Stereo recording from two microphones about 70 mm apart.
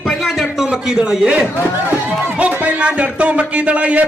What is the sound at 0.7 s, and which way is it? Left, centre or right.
A man's voice, centre.